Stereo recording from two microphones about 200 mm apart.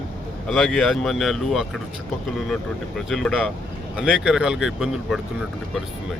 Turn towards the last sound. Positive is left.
turn(degrees=-5)  # may be behind; listen again after turning